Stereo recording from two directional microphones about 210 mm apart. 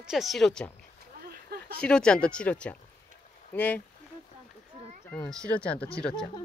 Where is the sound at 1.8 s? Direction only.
5° left (ahead or behind).